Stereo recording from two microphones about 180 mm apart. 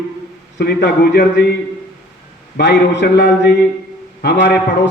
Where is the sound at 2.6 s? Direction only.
75° left (ahead or behind).